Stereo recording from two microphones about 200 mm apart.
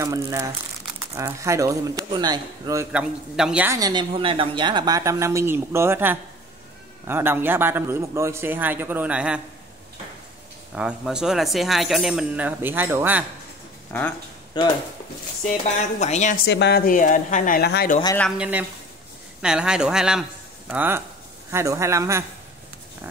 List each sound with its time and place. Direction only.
0.0 s a man's voice: 15° right (ahead or behind)
10.7 s speech: 5° right (ahead or behind)
13.9 s speech: 10° left (ahead or behind)
14.5 s speech: 20° left (ahead or behind)
15.5 s a woman's voice: 35° left (ahead or behind)
16.4 s speech: 55° left (ahead or behind)
18.4 s a man's voice: 10° right (ahead or behind)